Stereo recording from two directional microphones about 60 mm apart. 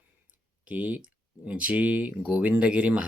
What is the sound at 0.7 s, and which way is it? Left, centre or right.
Speech, right.